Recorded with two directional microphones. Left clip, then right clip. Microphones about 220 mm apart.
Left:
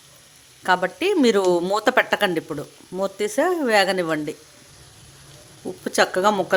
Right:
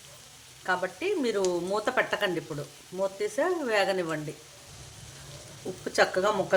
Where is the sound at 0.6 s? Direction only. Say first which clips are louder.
Left 9 dB; 50° left (ahead or behind).